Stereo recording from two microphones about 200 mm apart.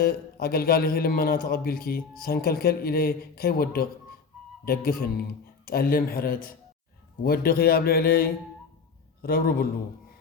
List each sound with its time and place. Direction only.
0.0 s a man's voice: 50° left (ahead or behind)